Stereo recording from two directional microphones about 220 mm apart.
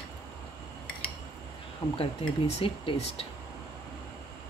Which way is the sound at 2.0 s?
25° left (ahead or behind).